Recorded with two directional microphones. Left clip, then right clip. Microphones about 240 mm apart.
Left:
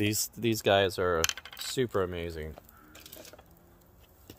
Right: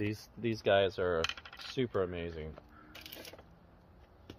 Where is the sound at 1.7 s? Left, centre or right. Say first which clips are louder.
Left 4 dB; left.